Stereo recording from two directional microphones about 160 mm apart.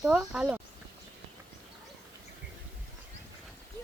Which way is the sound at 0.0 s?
5° right (ahead or behind).